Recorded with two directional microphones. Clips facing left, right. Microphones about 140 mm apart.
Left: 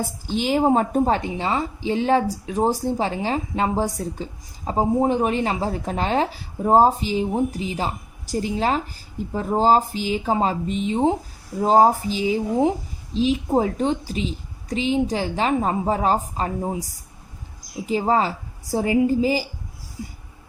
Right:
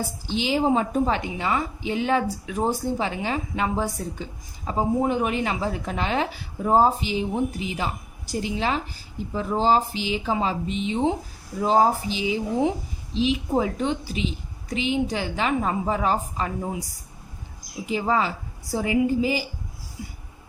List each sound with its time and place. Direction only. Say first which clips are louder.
0.3 s a woman's voice: left 3 dB; 45° left (ahead or behind)
17.8 s a woman's voice: left 3 dB; 35° left (ahead or behind)